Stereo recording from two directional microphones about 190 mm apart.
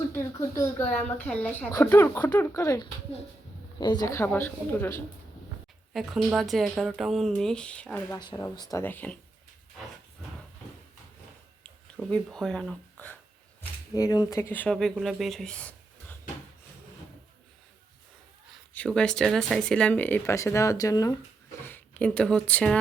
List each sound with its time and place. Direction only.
0.1 s speech: 15° left (ahead or behind)
5.9 s speech: centre (ahead or behind)
8.2 s speech: 25° left (ahead or behind)
12.1 s speech: 5° left (ahead or behind)
13.6 s speech: 20° left (ahead or behind)
18.7 s speech: 5° left (ahead or behind)